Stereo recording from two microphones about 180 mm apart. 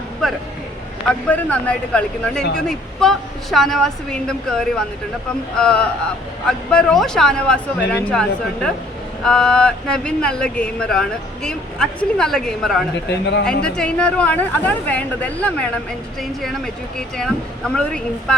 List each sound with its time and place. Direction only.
0.2 s a sound: centre (ahead or behind)
1.0 s speech: 5° left (ahead or behind)
13.1 s a man's voice: 75° left (ahead or behind)
13.4 s speech: 5° left (ahead or behind)
17.2 s speech: 5° left (ahead or behind)